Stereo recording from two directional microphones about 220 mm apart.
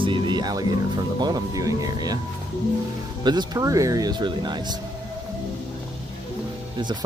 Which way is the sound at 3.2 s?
20° right (ahead or behind).